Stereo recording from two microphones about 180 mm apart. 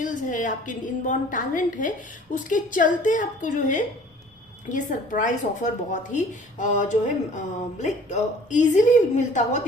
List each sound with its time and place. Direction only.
0.0 s speech: 45° left (ahead or behind)